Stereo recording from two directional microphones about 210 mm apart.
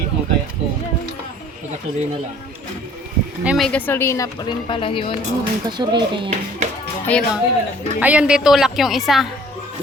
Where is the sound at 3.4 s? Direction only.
Centre (ahead or behind); by 5.1 s 25° left (ahead or behind).